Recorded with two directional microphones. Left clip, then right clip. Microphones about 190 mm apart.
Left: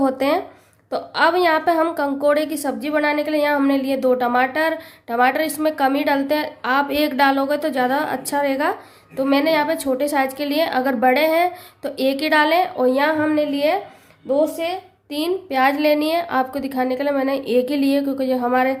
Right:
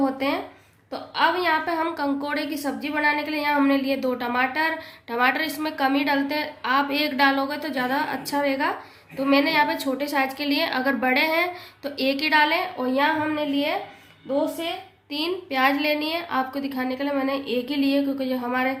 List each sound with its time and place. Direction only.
0.0 s a woman's voice: 65° left (ahead or behind)